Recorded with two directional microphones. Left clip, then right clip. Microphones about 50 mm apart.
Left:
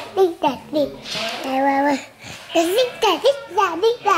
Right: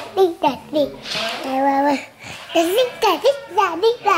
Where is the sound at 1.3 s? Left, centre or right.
Centre.